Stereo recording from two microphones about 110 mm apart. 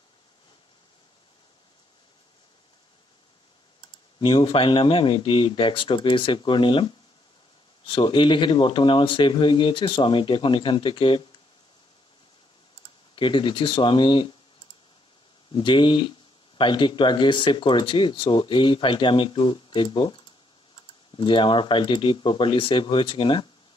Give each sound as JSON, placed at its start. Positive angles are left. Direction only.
{"t": 4.2, "sound": "speech", "side_deg": 55}
{"t": 13.1, "sound": "speech", "side_deg": 50}
{"t": 15.5, "sound": "speech", "side_deg": 50}
{"t": 21.2, "sound": "speech", "side_deg": 50}